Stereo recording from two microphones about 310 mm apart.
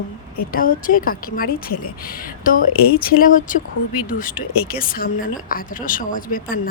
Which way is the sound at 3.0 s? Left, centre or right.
Left.